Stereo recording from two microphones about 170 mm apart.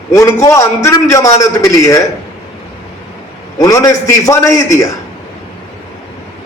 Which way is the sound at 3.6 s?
20° left (ahead or behind).